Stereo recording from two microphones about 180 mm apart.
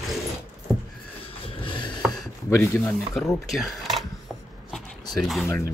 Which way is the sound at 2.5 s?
15° left (ahead or behind).